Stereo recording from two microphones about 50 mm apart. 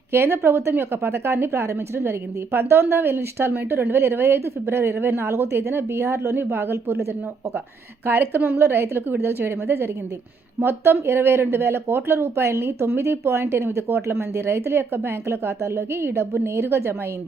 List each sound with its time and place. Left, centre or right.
0.1 s a woman's voice: right
8.0 s a woman's voice: right
10.6 s speech: right